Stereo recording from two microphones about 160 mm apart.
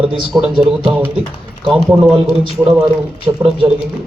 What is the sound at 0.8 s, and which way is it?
Speech, 15° right (ahead or behind).